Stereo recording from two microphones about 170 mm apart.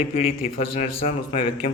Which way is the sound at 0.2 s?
35° left (ahead or behind).